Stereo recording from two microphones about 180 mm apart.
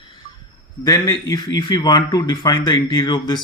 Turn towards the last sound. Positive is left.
turn(degrees=25)  # may be behind; listen again after turning